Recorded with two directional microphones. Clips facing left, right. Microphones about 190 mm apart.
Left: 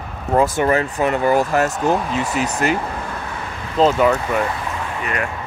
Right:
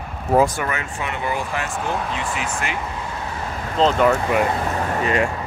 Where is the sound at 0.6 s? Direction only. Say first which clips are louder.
Left 9 dB; 35° left (ahead or behind).